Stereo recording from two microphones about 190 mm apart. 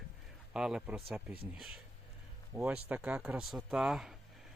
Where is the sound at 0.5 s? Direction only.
5° right (ahead or behind).